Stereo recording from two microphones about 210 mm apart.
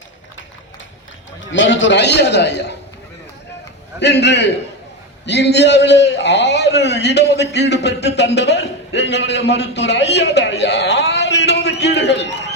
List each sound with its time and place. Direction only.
1.5 s a man's voice: 60° left (ahead or behind)
4.0 s a man's voice: 55° left (ahead or behind)